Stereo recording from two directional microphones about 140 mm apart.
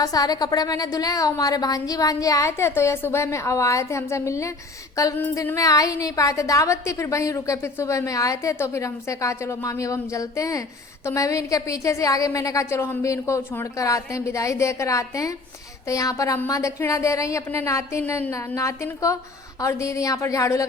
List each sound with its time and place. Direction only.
0.0 s a woman's voice: 25° left (ahead or behind)